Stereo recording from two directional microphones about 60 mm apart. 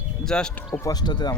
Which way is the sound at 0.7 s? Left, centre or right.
Left.